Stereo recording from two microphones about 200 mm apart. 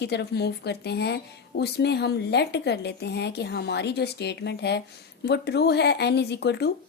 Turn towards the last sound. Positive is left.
turn(degrees=55)  # may be behind; listen again after turning